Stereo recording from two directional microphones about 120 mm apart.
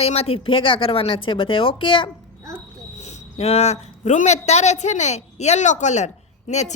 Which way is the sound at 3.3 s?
60° left (ahead or behind).